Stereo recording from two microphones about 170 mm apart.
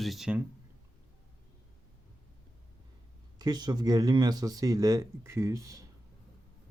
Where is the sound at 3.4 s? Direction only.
25° right (ahead or behind).